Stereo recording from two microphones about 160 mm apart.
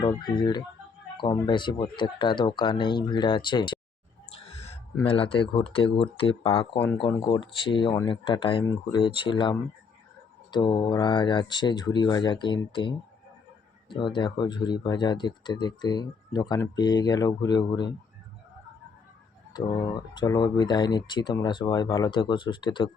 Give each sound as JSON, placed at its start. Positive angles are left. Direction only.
{"t": 0.0, "sound": "speech", "side_deg": 25}
{"t": 4.4, "sound": "a sound", "side_deg": 40}
{"t": 5.0, "sound": "speech", "side_deg": 35}
{"t": 19.5, "sound": "speech", "side_deg": 25}